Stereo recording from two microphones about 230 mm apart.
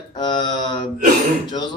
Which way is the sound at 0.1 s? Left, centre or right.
Centre.